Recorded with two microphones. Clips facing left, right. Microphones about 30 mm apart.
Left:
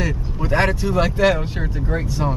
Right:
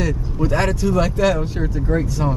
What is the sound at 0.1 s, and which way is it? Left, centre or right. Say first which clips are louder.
Speech: right 1 dB; centre.